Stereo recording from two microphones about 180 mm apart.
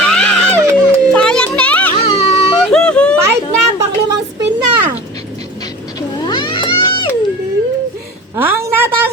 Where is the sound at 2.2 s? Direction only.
35° left (ahead or behind).